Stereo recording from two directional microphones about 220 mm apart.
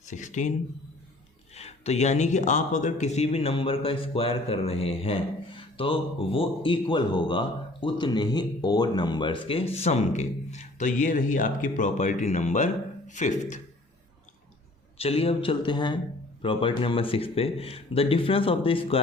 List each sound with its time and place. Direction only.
0.0 s speech: 35° left (ahead or behind)
1.5 s a man's voice: 30° left (ahead or behind)
14.9 s a man's voice: 25° left (ahead or behind)